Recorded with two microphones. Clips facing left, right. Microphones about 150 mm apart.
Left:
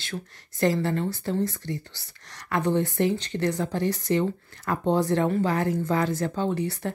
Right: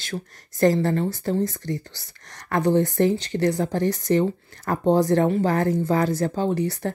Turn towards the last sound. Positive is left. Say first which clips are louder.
# right 3 dB
turn(degrees=-40)  # may be behind; listen again after turning